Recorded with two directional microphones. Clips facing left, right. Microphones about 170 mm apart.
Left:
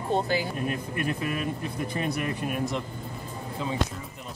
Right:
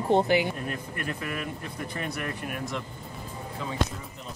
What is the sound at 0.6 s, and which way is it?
Speech, 20° left (ahead or behind).